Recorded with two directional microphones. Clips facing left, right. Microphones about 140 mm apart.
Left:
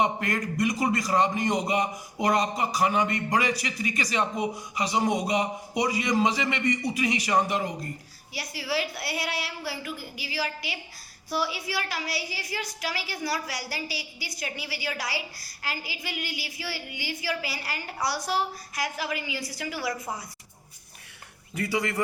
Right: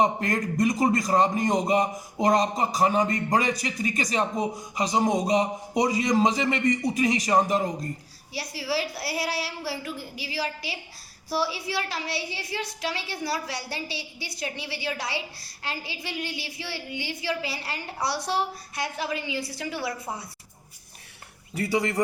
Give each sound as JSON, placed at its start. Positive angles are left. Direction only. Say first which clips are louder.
{"t": 0.0, "sound": "a woman's voice", "louder": "right 2 dB", "side_deg": -40}
{"t": 21.5, "sound": "a woman's voice", "louder": "right 3 dB", "side_deg": -30}